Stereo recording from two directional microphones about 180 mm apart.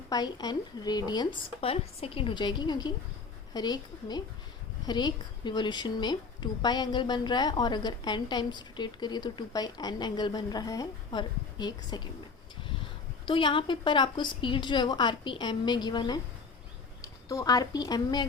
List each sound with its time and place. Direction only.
0.1 s a woman's voice: 20° left (ahead or behind)
1.6 s a woman's voice: 35° left (ahead or behind)
13.2 s a woman's voice: 30° left (ahead or behind)